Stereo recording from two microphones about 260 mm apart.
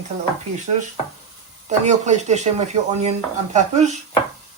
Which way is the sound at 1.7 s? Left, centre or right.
Right.